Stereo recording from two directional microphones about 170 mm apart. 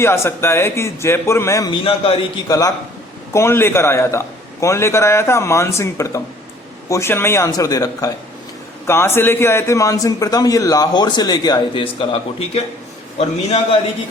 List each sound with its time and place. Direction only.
0.0 s a man's voice: 15° left (ahead or behind); by 2.4 s 35° left (ahead or behind)
2.5 s a man's voice: 20° left (ahead or behind); by 13.7 s 35° left (ahead or behind)